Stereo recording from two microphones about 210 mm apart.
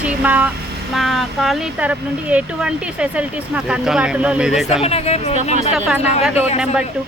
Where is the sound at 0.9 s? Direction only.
Centre (ahead or behind).